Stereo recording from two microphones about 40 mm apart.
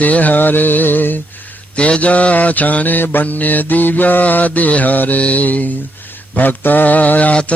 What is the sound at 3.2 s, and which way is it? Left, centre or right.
Mantra, left.